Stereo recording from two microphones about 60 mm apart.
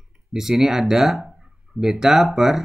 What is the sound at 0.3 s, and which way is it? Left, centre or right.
Speech, centre.